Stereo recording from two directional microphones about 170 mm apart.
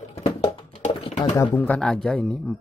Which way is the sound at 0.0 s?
40° left (ahead or behind).